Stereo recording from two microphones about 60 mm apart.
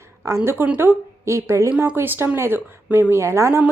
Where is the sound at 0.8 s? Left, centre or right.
Right.